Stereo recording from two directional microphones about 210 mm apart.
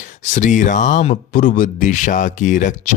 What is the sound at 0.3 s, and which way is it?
Speech, 35° left (ahead or behind).